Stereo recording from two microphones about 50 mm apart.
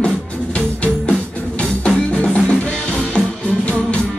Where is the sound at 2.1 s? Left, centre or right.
Left.